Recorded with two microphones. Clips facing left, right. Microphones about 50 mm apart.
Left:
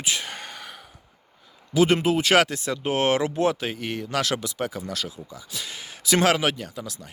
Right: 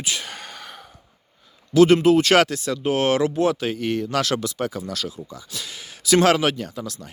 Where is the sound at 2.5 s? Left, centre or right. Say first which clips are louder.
Right 3 dB; left.